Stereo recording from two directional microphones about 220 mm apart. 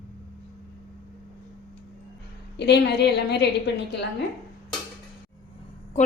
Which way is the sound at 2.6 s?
50° left (ahead or behind).